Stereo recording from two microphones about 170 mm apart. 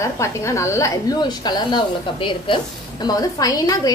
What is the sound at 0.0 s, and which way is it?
A woman's voice, 15° left (ahead or behind).